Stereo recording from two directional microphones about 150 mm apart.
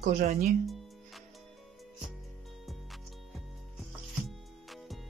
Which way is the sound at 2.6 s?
Centre (ahead or behind).